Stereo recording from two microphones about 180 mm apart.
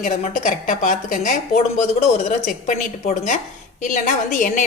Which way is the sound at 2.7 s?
45° left (ahead or behind).